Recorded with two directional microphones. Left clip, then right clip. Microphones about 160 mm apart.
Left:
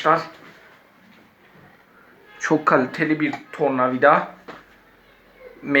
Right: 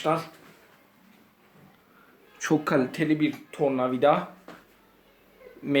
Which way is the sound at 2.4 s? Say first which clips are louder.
Left 7 dB; 85° right.